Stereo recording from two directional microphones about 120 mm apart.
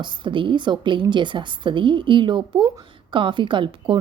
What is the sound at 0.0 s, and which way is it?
Speech, 40° right (ahead or behind).